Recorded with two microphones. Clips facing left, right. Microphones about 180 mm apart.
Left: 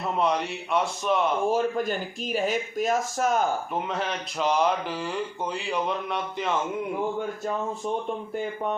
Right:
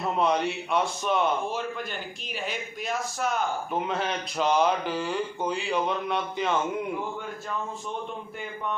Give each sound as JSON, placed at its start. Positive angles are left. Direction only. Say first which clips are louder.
{"t": 0.0, "sound": "speech", "louder": "right 1 dB", "side_deg": 0}
{"t": 1.5, "sound": "speech", "louder": "left 8 dB", "side_deg": 45}
{"t": 3.8, "sound": "speech", "louder": "right 1 dB", "side_deg": 0}